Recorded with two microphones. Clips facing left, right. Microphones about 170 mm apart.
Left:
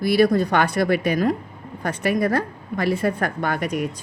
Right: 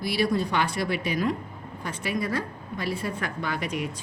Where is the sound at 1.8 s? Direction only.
60° left (ahead or behind).